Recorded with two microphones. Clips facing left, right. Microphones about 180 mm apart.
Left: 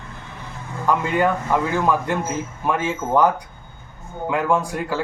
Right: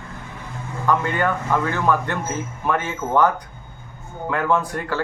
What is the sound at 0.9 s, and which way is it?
Speech, 10° left (ahead or behind).